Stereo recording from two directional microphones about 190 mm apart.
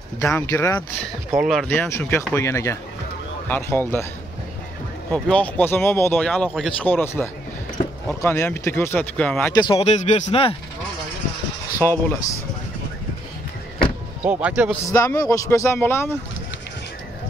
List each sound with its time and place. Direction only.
0.2 s speech: 15° left (ahead or behind)
1.3 s speech: centre (ahead or behind)
1.7 s speech: 10° left (ahead or behind)
5.1 s speech: 5° left (ahead or behind)
9.6 s speech: 30° left (ahead or behind)
11.8 s speech: 15° left (ahead or behind)
14.2 s a man's voice: 10° right (ahead or behind)
14.7 s speech: 15° left (ahead or behind)